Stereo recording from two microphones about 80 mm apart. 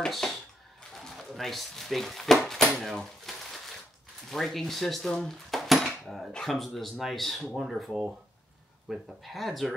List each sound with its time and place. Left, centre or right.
0.0 s speech: centre
0.9 s a sound: centre
4.3 s speech: centre